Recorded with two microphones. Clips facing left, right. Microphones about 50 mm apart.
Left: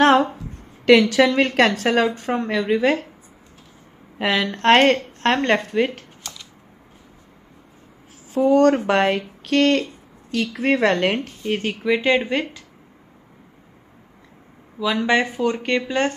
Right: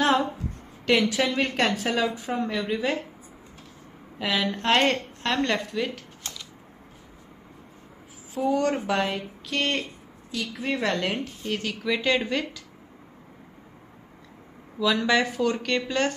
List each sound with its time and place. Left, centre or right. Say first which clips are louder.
0.0 s a sound: left 7 dB; left
0.8 s a woman's voice: left 9 dB; left
4.2 s a woman's voice: left 6 dB; left
6.2 s typewriter: left 1 dB; right
8.4 s a woman's voice: left 7 dB; left
8.8 s a woman's voice: left 7 dB; left
10.3 s a woman's voice: left 9 dB; left
11.4 s speech: left 7 dB; left
14.9 s speech: left 3 dB; left